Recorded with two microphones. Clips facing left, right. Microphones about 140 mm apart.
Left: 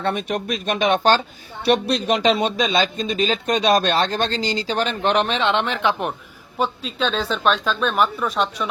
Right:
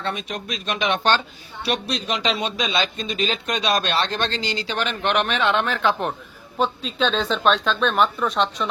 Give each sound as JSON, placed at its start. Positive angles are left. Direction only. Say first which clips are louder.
{"t": 0.0, "sound": "speech", "louder": "left 5 dB", "side_deg": 55}
{"t": 1.6, "sound": "speech", "louder": "left 7 dB", "side_deg": 55}
{"t": 6.6, "sound": "speech", "louder": "right 1 dB", "side_deg": 0}